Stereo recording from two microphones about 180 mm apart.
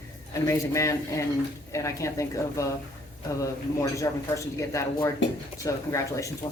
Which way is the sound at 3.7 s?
15° left (ahead or behind).